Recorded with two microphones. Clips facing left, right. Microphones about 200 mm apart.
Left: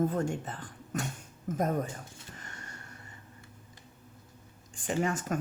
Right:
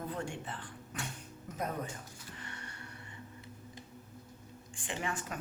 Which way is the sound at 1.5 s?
45° left (ahead or behind).